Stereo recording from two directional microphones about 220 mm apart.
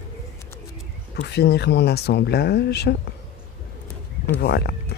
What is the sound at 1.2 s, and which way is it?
Speech, 50° left (ahead or behind).